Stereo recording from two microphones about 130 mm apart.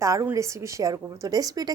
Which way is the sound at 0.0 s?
25° right (ahead or behind).